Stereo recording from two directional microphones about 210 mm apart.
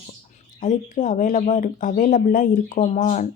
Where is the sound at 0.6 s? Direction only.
35° left (ahead or behind).